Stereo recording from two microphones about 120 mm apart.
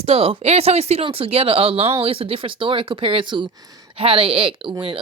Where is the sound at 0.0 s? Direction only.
55° right (ahead or behind).